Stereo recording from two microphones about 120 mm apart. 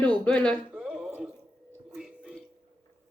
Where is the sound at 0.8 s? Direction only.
Centre (ahead or behind).